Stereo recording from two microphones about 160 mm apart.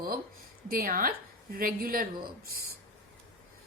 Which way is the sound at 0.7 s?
65° right (ahead or behind).